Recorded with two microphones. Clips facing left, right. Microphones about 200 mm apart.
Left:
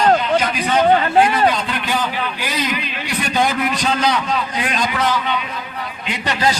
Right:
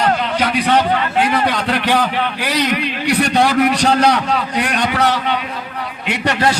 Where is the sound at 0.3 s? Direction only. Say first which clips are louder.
Right 2 dB; 65° right (ahead or behind).